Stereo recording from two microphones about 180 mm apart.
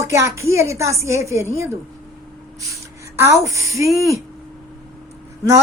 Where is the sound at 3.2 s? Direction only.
15° right (ahead or behind).